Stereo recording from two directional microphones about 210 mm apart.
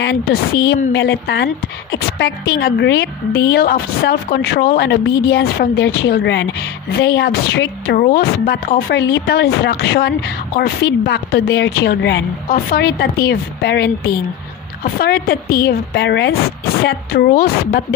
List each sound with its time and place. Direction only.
0.0 s a woman's voice: 50° left (ahead or behind)